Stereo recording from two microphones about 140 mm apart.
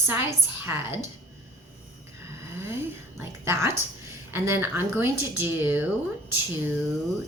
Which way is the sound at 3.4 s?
20° right (ahead or behind).